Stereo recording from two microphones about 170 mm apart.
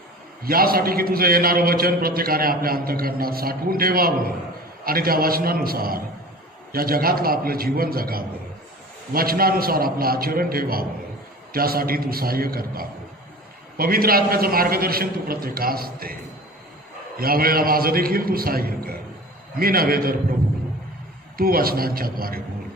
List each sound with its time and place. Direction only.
0.4 s a man's voice: 60° right (ahead or behind)
17.2 s a man's voice: 60° right (ahead or behind)
21.3 s a man's voice: 60° right (ahead or behind)